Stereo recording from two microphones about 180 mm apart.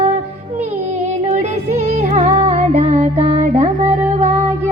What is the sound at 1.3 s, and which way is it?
Music, 40° right (ahead or behind).